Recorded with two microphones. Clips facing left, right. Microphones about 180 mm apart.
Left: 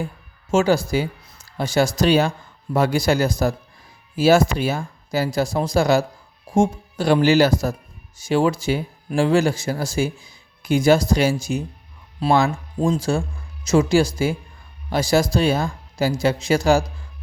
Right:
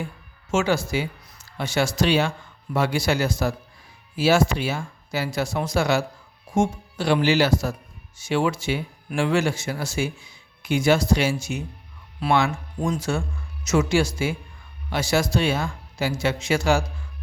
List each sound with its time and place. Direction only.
0.5 s a man's voice: 35° left (ahead or behind)